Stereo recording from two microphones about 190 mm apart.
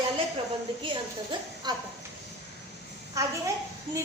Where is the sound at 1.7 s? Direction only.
20° right (ahead or behind).